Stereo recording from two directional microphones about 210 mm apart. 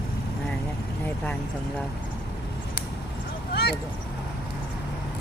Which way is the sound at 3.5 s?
50° left (ahead or behind).